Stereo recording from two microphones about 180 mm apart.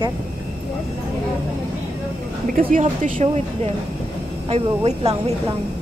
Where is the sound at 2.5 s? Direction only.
45° right (ahead or behind).